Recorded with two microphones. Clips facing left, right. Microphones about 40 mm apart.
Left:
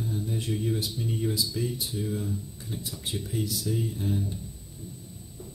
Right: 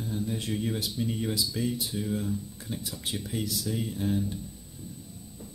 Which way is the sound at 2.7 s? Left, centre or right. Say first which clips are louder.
Right 1 dB; right.